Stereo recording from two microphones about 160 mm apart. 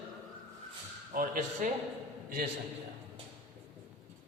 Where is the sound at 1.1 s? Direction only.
55° right (ahead or behind).